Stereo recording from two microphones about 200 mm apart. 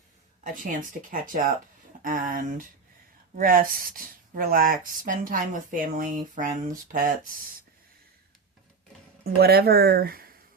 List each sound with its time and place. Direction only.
0.4 s speech: 40° right (ahead or behind)
9.4 s speech: 50° right (ahead or behind)